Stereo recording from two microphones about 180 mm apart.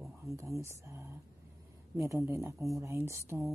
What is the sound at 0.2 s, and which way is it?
Speech, 15° right (ahead or behind).